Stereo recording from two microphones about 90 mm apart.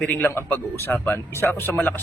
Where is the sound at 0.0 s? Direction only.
20° left (ahead or behind).